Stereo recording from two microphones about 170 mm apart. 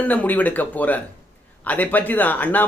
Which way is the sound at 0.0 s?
10° left (ahead or behind).